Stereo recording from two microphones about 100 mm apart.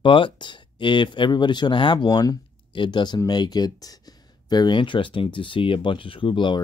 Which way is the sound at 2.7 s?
50° left (ahead or behind).